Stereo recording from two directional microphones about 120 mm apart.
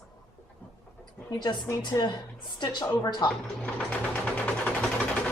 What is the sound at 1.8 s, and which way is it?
A woman's voice, 35° left (ahead or behind).